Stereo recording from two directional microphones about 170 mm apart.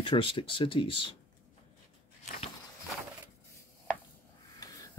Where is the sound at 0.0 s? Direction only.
30° left (ahead or behind).